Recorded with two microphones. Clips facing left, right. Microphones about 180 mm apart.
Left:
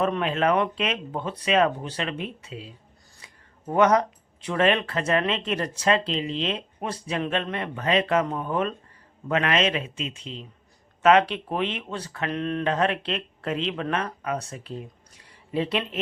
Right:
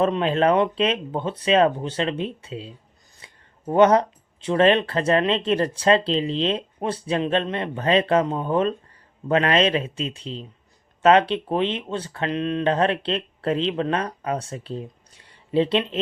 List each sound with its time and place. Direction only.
0.0 s speech: 30° right (ahead or behind)
3.2 s a sound: 30° right (ahead or behind)
3.7 s speech: 30° right (ahead or behind)
12.6 s speech: 30° right (ahead or behind)